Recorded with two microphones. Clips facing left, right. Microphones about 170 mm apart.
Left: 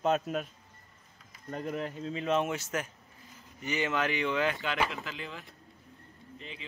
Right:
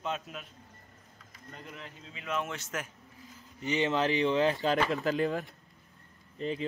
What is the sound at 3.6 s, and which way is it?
Speech, 25° right (ahead or behind).